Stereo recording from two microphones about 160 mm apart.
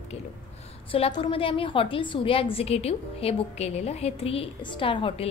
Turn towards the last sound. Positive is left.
turn(degrees=35)  # may be behind; listen again after turning